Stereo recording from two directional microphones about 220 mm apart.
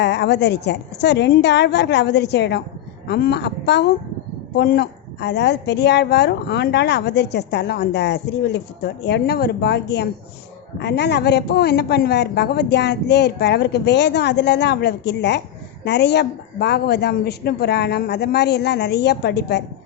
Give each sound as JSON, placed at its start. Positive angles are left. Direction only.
{"t": 0.0, "sound": "a woman's voice", "side_deg": 50}